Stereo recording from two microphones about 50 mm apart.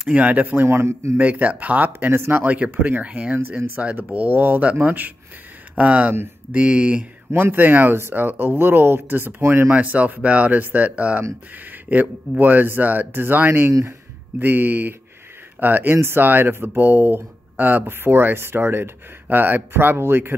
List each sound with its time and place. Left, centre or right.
0.1 s speech: right
0.7 s a man's voice: right
1.1 s speech: right
1.9 s speech: right
2.4 s speech: right
7.5 s speech: right
9.7 s speech: right
13.7 s speech: right
14.4 s speech: right
18.0 s speech: right
19.2 s speech: right